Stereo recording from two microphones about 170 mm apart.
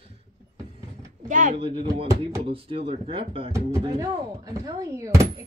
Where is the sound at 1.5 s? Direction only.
30° right (ahead or behind).